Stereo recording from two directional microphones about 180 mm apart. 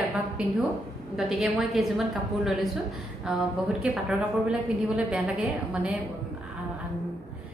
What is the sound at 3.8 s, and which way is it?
A woman's voice, 5° right (ahead or behind).